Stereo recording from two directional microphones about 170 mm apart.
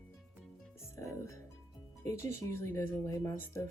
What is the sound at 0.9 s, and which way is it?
Speech, 15° left (ahead or behind).